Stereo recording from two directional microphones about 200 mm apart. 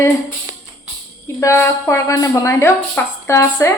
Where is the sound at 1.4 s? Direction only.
15° left (ahead or behind).